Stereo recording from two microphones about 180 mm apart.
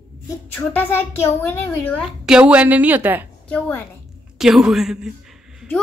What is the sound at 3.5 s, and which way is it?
Speech, 10° left (ahead or behind).